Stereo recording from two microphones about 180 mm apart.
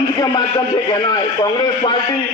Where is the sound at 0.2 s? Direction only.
20° left (ahead or behind).